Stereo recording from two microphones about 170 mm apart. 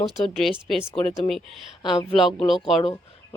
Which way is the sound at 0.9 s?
35° left (ahead or behind).